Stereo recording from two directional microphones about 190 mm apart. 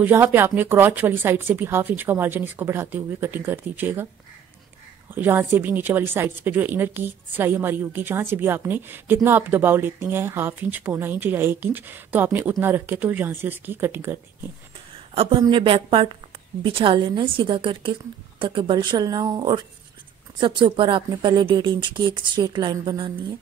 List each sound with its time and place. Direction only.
0.0 s a woman's voice: 10° right (ahead or behind)
5.1 s a woman's voice: 10° right (ahead or behind)
15.1 s a woman's voice: 30° right (ahead or behind)